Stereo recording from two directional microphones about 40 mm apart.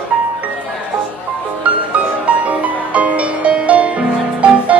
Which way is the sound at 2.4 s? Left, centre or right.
Right.